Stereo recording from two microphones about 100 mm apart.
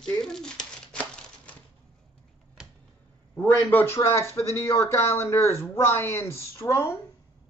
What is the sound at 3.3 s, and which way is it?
Speech, 20° left (ahead or behind).